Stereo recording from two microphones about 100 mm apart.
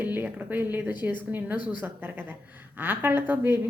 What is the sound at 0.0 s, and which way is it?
A woman's voice, 15° right (ahead or behind).